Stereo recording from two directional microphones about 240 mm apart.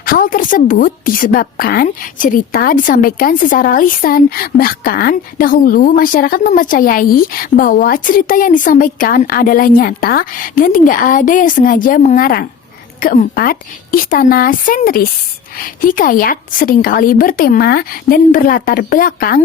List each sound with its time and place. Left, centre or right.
0.0 s a woman's voice: left